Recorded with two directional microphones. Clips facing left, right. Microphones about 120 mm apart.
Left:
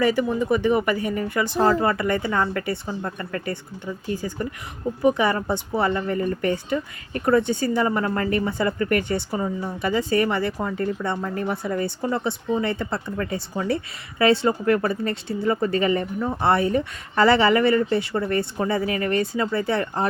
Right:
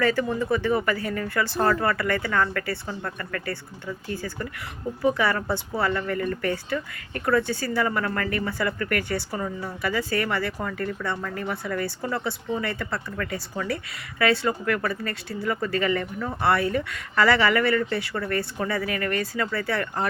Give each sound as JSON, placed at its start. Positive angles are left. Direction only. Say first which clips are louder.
{"t": 0.0, "sound": "speech", "louder": "left 3 dB", "side_deg": 15}